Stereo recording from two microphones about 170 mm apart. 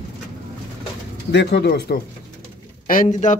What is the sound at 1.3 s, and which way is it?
Speech, 85° left.